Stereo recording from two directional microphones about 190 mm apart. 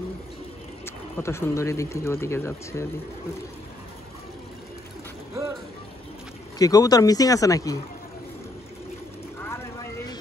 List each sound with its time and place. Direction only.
0.8 s speech: 15° left (ahead or behind)
5.3 s vehicle: 15° right (ahead or behind)
6.6 s speech: 20° left (ahead or behind)
9.4 s vehicle: 15° left (ahead or behind)